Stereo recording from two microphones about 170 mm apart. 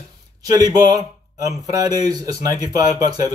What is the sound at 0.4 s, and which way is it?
Speech, 20° right (ahead or behind).